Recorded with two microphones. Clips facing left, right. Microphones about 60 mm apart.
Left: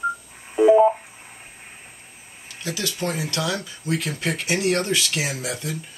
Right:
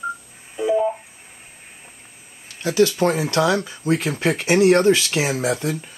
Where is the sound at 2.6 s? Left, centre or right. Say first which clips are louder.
Right 10 dB; right.